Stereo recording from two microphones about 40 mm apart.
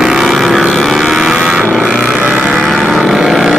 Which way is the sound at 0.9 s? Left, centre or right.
Centre.